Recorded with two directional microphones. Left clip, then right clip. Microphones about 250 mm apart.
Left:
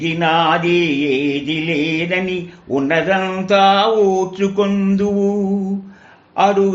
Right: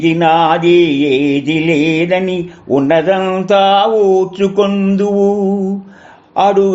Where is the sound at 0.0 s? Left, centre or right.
Right.